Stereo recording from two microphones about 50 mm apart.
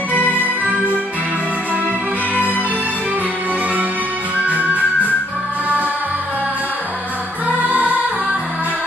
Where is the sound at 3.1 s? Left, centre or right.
Right.